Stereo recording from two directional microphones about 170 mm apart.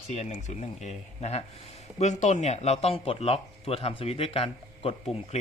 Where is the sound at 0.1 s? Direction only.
40° left (ahead or behind).